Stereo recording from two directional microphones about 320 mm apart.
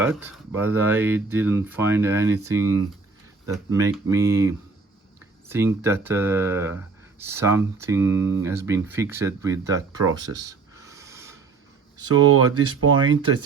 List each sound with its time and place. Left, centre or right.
0.0 s speech: centre
10.3 s a sound: centre
12.0 s speech: right